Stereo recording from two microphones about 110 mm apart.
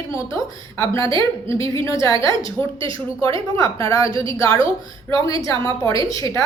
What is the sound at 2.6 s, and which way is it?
Speech, 15° left (ahead or behind).